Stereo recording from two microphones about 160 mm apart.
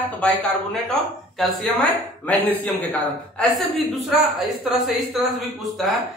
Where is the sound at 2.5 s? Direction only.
10° left (ahead or behind).